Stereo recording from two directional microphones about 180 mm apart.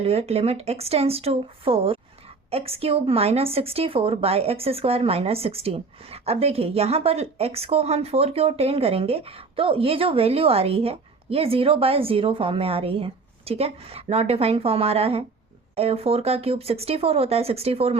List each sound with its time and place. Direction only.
0.0 s speech: 35° right (ahead or behind)